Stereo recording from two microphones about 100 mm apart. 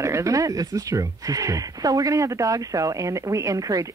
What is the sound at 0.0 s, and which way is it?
Speech, 30° right (ahead or behind).